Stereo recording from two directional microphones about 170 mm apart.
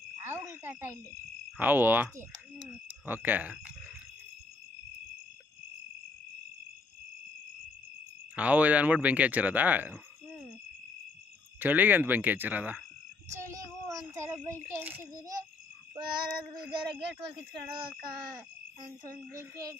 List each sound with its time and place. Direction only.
0.5 s speech: 15° right (ahead or behind)
8.4 s speech: 10° right (ahead or behind)
11.6 s a child's voice: 10° right (ahead or behind)
16.0 s child singing: 25° right (ahead or behind)
18.1 s child singing: 25° right (ahead or behind)